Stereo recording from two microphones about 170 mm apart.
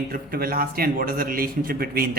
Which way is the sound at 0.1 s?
60° right (ahead or behind).